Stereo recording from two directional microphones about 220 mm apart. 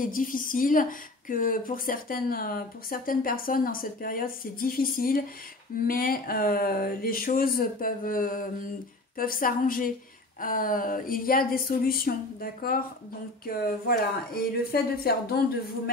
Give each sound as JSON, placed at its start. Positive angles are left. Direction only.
{"t": 0.0, "sound": "speech", "side_deg": 40}